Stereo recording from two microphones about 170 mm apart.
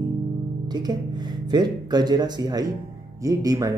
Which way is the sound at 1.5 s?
25° right (ahead or behind).